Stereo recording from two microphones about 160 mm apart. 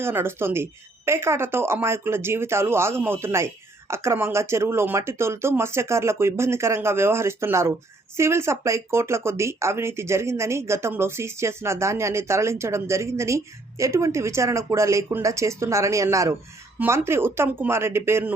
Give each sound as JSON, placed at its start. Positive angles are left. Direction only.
{"t": 0.0, "sound": "speech", "side_deg": -15}